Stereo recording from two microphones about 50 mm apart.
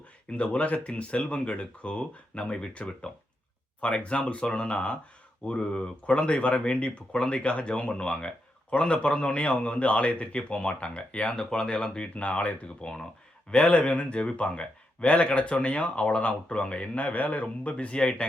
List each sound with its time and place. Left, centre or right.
0.3 s speech: left